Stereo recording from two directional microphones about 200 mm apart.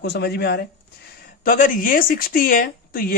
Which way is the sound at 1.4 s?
40° left (ahead or behind).